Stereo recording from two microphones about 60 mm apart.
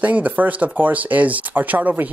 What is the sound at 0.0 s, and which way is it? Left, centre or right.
Speech, right.